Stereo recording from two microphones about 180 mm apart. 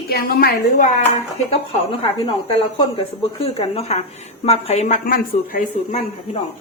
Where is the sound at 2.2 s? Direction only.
30° left (ahead or behind).